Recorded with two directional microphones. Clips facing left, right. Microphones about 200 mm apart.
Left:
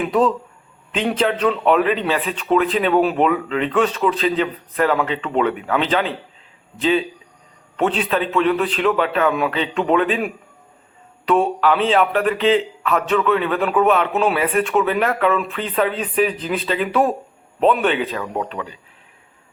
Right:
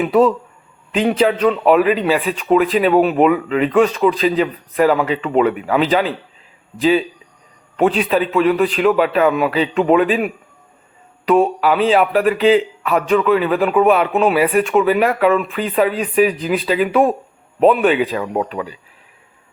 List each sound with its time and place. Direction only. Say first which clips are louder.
0.0 s a man's voice: right 4 dB; 5° right (ahead or behind)
7.8 s a man's voice: right 4 dB; 10° right (ahead or behind)